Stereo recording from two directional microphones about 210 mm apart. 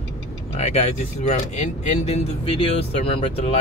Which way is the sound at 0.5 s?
30° left (ahead or behind).